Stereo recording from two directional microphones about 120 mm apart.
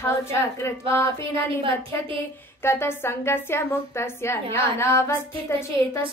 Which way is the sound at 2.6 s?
20° left (ahead or behind).